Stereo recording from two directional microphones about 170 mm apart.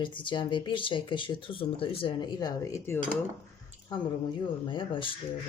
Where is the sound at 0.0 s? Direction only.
30° left (ahead or behind).